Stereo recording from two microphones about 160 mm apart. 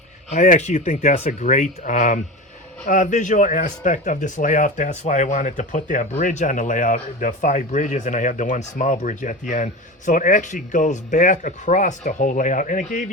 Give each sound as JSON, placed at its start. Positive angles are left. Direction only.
{"t": 0.3, "sound": "speech", "side_deg": 50}